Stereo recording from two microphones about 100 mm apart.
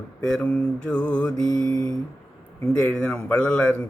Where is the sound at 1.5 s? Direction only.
40° left (ahead or behind).